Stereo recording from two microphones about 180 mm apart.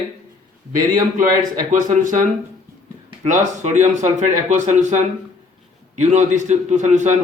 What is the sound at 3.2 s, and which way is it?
A man's voice, 45° right (ahead or behind).